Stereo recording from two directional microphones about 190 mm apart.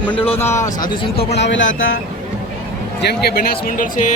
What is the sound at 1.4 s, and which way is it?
Speech, 75° left (ahead or behind).